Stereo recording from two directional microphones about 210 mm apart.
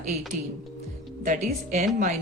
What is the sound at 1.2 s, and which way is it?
Speech, 35° right (ahead or behind).